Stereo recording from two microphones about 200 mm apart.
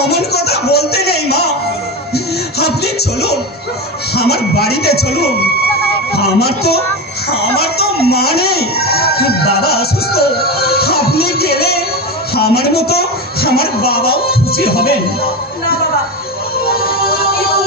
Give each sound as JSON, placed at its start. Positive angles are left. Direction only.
{"t": 0.0, "sound": "music", "side_deg": 55}
{"t": 4.1, "sound": "speech", "side_deg": 55}
{"t": 7.6, "sound": "music", "side_deg": 50}
{"t": 12.3, "sound": "a sound", "side_deg": 50}
{"t": 16.6, "sound": "music", "side_deg": 50}